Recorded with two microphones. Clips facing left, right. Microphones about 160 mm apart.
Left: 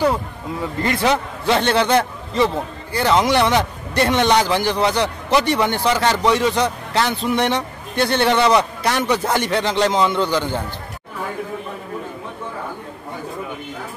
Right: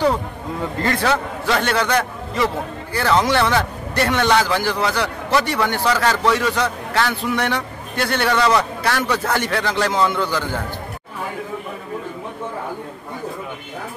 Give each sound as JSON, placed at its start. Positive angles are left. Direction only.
{"t": 0.8, "sound": "a man's voice", "side_deg": 20}